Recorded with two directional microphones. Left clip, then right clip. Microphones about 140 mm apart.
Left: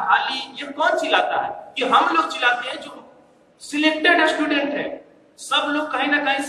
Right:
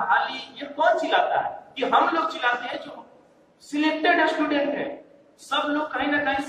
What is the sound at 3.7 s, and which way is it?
Chant, 25° right (ahead or behind).